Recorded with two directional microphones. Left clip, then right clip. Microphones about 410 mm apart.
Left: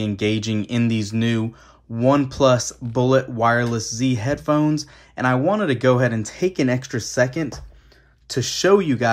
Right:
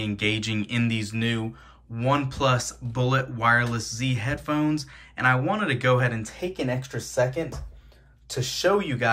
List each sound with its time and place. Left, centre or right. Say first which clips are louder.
0.0 s speech: left 3 dB; centre